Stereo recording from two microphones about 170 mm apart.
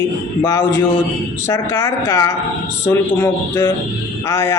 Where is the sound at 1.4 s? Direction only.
20° left (ahead or behind).